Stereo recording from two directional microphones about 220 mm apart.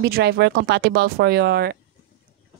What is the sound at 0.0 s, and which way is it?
Speech, 50° right (ahead or behind).